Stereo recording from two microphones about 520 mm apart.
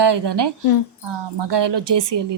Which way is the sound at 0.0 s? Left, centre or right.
Right.